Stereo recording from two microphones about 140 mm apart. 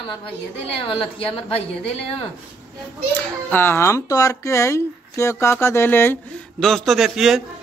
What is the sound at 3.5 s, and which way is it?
Speech, 15° left (ahead or behind).